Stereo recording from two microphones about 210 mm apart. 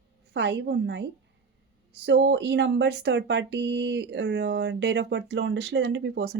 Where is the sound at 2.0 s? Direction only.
55° right (ahead or behind).